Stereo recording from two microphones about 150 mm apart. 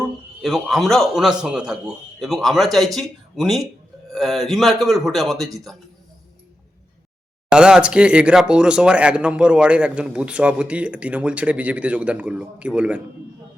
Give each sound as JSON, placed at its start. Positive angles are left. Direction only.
{"t": 0.4, "sound": "speech", "side_deg": 0}
{"t": 7.5, "sound": "speech", "side_deg": -5}